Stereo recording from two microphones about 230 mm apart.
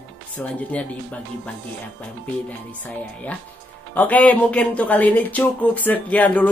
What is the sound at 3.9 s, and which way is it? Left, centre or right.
A man's voice, centre.